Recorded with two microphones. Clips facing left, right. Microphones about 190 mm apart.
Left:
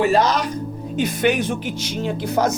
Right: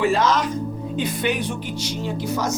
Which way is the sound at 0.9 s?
85° left.